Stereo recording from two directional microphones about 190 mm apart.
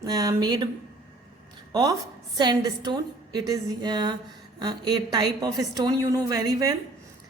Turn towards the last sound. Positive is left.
turn(degrees=-20)  # may be behind; listen again after turning